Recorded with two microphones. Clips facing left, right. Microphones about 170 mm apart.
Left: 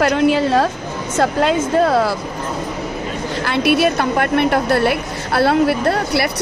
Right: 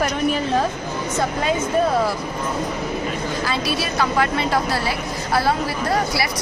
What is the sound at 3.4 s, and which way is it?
A woman's voice, 65° left (ahead or behind).